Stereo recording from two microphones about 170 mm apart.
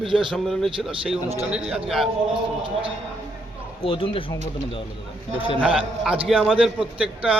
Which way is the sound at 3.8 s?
30° left (ahead or behind).